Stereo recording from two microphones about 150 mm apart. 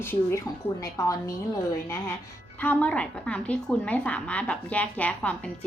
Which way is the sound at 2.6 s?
10° left (ahead or behind).